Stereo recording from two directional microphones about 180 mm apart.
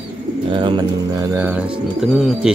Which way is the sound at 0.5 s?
25° right (ahead or behind).